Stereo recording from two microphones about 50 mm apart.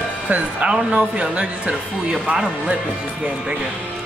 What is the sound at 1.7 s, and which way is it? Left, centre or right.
Speech, centre.